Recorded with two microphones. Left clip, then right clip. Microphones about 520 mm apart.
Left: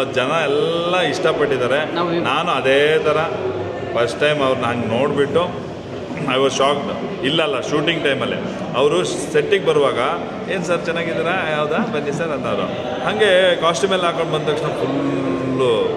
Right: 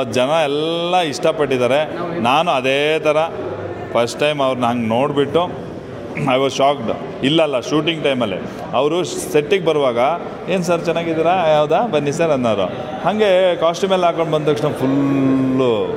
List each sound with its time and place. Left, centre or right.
0.1 s a man's voice: right
6.2 s a man's voice: right